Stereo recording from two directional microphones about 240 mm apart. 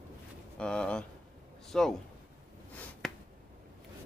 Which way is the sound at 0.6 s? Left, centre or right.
Centre.